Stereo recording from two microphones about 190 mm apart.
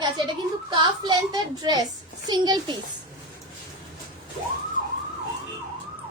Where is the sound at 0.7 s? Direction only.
25° right (ahead or behind).